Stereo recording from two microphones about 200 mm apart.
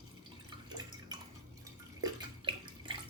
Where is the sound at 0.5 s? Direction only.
20° right (ahead or behind).